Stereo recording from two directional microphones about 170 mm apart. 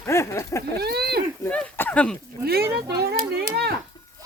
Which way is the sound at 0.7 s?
70° right (ahead or behind).